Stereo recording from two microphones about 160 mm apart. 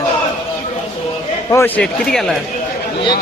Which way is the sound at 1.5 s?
15° left (ahead or behind).